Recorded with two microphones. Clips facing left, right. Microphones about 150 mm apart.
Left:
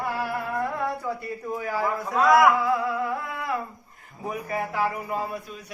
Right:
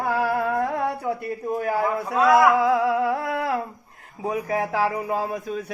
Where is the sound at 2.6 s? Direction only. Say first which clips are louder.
Right 5 dB; 90° right; by 3.6 s 75° right (ahead or behind).